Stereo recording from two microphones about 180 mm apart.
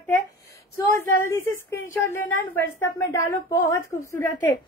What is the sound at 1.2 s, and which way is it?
A woman's voice, 15° left (ahead or behind).